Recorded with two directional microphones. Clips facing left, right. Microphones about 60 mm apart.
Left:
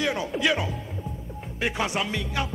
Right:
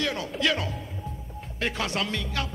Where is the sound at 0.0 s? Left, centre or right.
Centre.